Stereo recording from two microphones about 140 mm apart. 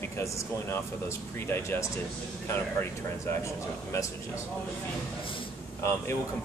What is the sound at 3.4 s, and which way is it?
Speech, 20° left (ahead or behind).